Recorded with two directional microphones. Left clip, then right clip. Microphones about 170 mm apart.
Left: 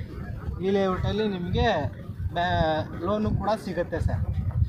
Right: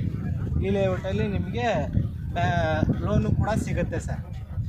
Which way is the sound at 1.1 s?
90° right.